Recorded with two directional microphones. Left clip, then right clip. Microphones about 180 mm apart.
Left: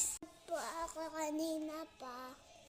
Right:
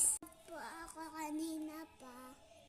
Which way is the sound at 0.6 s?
10° right (ahead or behind).